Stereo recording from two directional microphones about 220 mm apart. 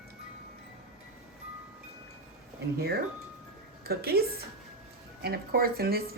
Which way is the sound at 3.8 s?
45° right (ahead or behind).